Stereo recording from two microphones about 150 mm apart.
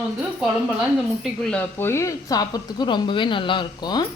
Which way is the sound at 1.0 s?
Centre (ahead or behind).